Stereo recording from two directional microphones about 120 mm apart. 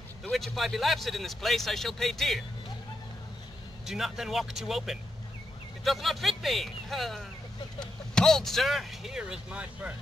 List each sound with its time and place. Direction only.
0.2 s speech: centre (ahead or behind)
3.8 s speech: 5° right (ahead or behind)